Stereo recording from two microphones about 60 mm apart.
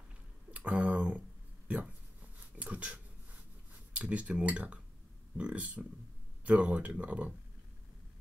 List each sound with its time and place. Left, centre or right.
0.5 s speech: right
2.3 s a sound: right
3.9 s speech: right